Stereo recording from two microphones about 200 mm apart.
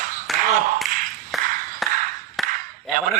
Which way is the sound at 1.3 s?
Centre (ahead or behind).